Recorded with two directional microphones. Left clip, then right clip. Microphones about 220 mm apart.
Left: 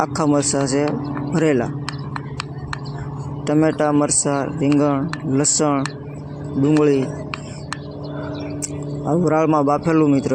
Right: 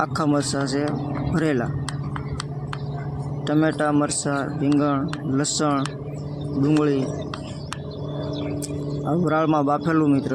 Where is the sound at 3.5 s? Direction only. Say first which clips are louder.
Left 4 dB; centre (ahead or behind).